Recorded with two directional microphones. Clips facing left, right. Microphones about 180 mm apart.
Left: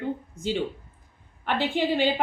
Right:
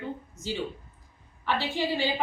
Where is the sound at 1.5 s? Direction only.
60° left (ahead or behind).